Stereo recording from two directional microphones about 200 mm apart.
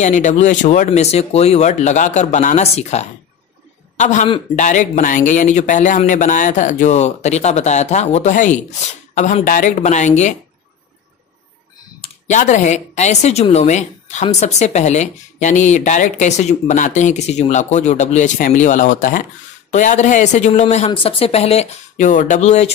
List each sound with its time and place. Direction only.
0.0 s a man's voice: 35° left (ahead or behind)
12.0 s speech: 35° left (ahead or behind)